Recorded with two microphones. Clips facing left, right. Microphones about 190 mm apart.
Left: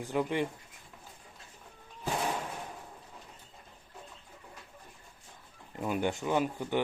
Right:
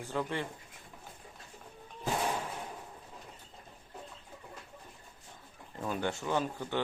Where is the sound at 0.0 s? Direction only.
15° left (ahead or behind).